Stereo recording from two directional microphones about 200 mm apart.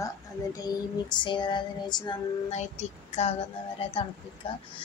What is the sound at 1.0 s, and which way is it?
Speech, 25° left (ahead or behind).